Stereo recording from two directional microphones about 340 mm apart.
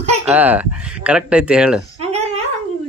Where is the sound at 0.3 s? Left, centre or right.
Centre.